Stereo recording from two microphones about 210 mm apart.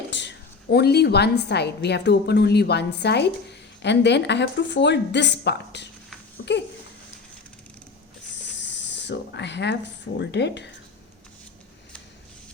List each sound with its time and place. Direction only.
0.1 s a woman's voice: 55° left (ahead or behind)
6.3 s babbling: 55° left (ahead or behind)
8.6 s a sound: 60° left (ahead or behind)